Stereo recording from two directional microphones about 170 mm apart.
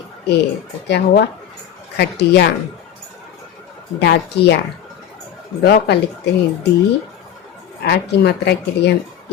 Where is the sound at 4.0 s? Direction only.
75° left (ahead or behind).